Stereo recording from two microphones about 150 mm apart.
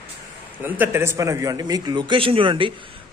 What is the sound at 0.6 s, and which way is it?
Speech, 15° right (ahead or behind).